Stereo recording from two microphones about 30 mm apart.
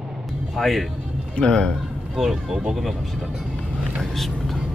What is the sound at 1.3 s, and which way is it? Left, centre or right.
Speech, left.